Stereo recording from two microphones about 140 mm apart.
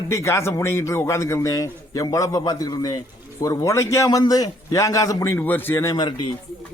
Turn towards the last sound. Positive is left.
turn(degrees=30)  # may be behind; listen again after turning